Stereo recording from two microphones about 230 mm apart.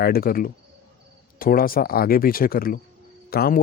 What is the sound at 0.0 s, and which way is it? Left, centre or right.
Speech, left.